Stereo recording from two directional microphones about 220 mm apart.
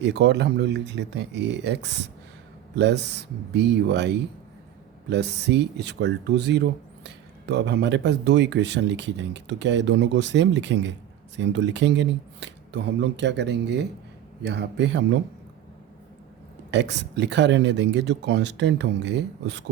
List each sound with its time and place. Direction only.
0.0 s speech: 50° right (ahead or behind)
16.7 s speech: 50° right (ahead or behind)